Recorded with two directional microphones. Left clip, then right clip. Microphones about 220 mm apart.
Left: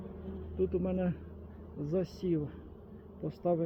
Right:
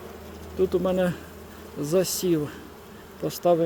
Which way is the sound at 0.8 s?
45° right (ahead or behind).